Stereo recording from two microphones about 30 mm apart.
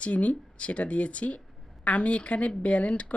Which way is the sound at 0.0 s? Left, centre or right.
Left.